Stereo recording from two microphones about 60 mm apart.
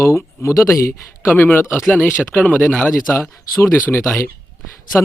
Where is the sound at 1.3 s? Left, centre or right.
Left.